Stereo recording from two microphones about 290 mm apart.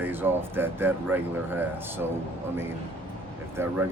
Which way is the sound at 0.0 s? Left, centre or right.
Centre.